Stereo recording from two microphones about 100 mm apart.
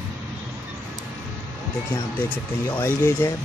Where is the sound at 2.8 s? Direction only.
20° left (ahead or behind).